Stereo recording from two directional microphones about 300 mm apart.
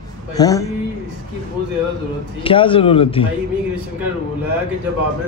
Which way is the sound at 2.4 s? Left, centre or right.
Centre.